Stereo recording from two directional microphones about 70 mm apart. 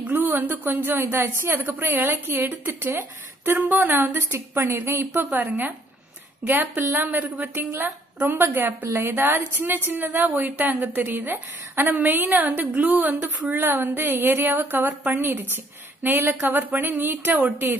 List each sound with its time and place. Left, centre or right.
0.0 s a woman's voice: right
4.6 s a woman's voice: right